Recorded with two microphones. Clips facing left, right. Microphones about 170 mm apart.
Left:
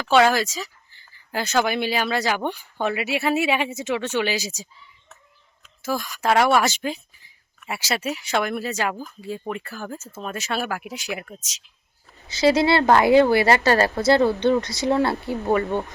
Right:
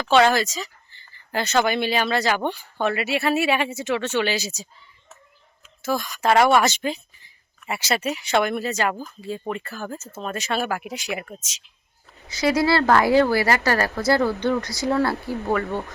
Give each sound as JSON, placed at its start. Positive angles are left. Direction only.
{"t": 0.0, "sound": "speech", "side_deg": 5}
{"t": 5.8, "sound": "speech", "side_deg": 5}
{"t": 12.3, "sound": "a woman's voice", "side_deg": 25}